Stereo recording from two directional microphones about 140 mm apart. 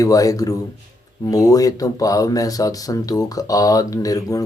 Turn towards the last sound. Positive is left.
turn(degrees=25)  # may be behind; listen again after turning